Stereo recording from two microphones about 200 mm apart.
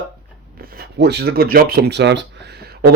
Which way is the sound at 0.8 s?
55° right (ahead or behind).